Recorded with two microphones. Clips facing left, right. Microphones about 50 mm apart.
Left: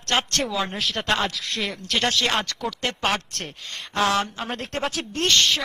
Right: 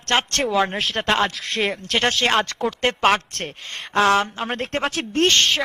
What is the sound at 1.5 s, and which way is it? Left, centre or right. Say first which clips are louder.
A woman's voice: right 5 dB; right.